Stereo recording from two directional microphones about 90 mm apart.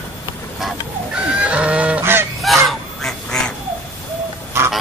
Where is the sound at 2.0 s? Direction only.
25° right (ahead or behind).